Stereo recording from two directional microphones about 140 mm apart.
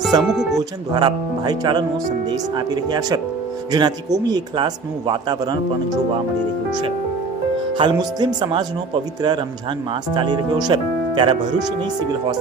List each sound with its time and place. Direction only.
0.1 s speech: 30° right (ahead or behind)
7.8 s speech: 30° right (ahead or behind)
10.2 s speech: 35° right (ahead or behind)
10.7 s music: 35° right (ahead or behind)